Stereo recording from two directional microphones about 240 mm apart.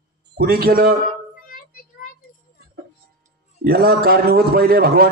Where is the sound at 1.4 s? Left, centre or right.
Left.